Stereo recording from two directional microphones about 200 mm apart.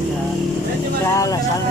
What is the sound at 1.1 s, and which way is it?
Vehicle, 15° left (ahead or behind).